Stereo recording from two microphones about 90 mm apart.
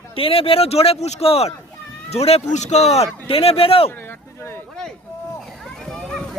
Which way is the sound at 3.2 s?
90° left.